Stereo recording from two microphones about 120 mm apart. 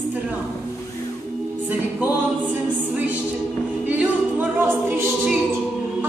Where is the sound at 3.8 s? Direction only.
15° right (ahead or behind).